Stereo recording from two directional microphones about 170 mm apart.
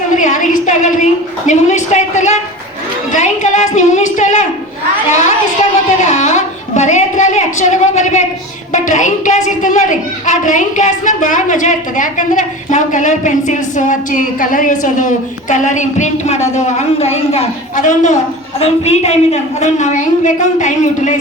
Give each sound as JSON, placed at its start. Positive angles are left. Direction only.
{"t": 0.2, "sound": "a woman's voice", "side_deg": 50}
{"t": 6.0, "sound": "a woman's voice", "side_deg": 45}